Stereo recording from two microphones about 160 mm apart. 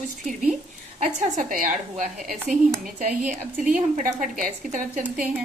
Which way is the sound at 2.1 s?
Centre (ahead or behind).